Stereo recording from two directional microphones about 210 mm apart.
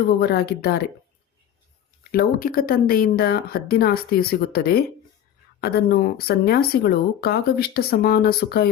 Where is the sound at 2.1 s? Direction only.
45° left (ahead or behind).